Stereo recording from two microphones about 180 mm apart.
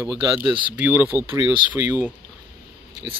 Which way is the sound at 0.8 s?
10° right (ahead or behind).